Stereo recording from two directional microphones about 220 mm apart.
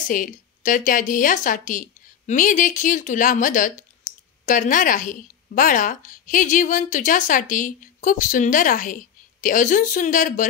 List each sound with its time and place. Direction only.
0.1 s a woman's voice: 35° left (ahead or behind)